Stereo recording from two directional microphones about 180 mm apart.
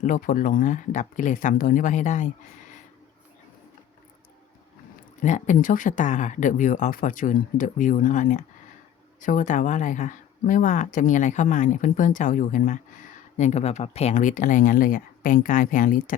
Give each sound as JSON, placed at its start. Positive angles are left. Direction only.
{"t": 0.0, "sound": "speech", "side_deg": 50}
{"t": 5.2, "sound": "speech", "side_deg": 45}